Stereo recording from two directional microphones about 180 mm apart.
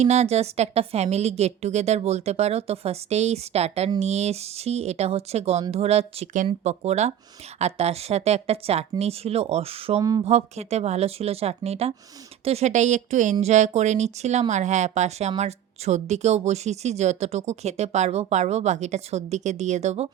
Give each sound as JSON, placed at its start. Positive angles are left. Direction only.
{"t": 0.0, "sound": "speech", "side_deg": -40}
{"t": 10.0, "sound": "speech", "side_deg": -20}
{"t": 10.2, "sound": "speech", "side_deg": -35}